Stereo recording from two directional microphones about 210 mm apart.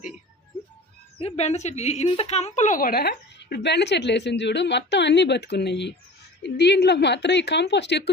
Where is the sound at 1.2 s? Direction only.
30° left (ahead or behind).